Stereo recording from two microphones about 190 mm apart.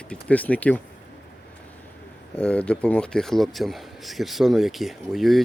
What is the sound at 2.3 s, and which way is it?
Speech, 5° left (ahead or behind).